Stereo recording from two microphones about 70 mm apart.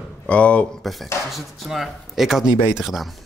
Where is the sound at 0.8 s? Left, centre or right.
Centre.